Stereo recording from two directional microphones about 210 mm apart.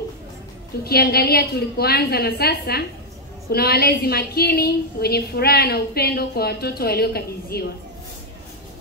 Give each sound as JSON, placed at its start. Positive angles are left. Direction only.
{"t": 0.8, "sound": "a woman's voice", "side_deg": 50}